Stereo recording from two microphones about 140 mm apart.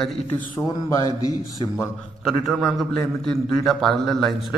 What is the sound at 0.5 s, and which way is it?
A man's voice, 20° left (ahead or behind).